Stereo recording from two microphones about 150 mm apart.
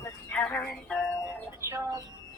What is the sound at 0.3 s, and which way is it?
Music, 10° left (ahead or behind).